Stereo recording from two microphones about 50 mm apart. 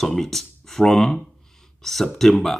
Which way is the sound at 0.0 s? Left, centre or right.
Centre.